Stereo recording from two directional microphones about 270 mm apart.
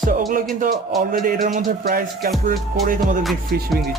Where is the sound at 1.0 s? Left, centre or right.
Right.